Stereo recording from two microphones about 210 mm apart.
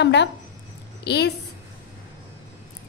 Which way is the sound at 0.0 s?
55° left (ahead or behind).